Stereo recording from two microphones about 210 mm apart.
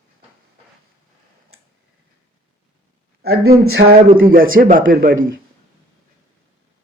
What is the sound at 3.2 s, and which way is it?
Speech, 50° right (ahead or behind).